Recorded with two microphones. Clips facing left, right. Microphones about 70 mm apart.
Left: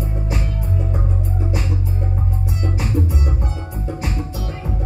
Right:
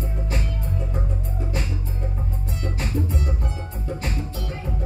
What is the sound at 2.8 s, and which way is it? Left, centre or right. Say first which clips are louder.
Music: left 3 dB; centre.